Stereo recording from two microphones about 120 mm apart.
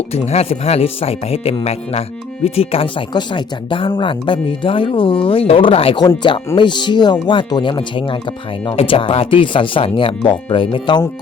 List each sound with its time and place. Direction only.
0.1 s speech: 60° left (ahead or behind)
6.6 s speech: 40° left (ahead or behind)